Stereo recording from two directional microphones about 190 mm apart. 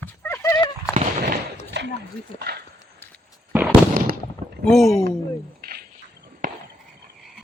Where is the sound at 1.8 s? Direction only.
65° right (ahead or behind).